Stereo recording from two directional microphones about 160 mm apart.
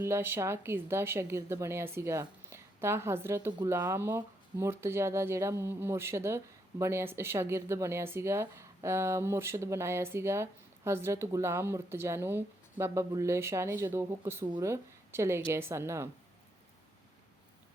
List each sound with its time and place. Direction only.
0.0 s a woman's voice: 15° right (ahead or behind)